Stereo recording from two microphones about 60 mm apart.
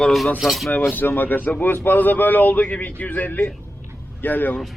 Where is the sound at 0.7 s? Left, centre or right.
Left.